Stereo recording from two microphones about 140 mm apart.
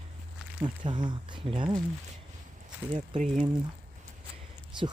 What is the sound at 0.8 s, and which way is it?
Speech, 35° right (ahead or behind).